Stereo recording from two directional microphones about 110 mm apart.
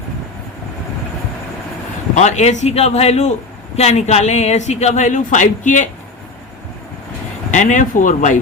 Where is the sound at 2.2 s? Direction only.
90° left.